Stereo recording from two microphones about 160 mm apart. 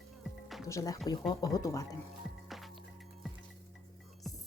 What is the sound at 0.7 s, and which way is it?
Speech, 20° left (ahead or behind).